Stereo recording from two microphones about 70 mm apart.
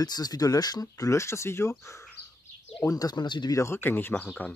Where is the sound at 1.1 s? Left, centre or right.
Left.